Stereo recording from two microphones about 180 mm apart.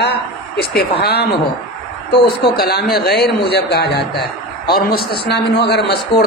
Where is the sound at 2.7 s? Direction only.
60° left (ahead or behind).